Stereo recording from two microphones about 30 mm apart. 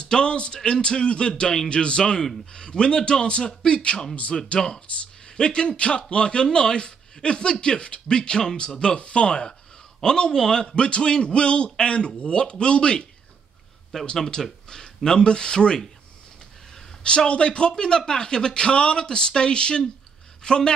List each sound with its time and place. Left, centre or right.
0.0 s speech: left
4.6 s speech: left
14.1 s speech: centre
17.3 s speech: left